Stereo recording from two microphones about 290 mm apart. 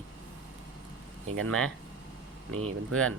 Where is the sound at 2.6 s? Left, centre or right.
Right.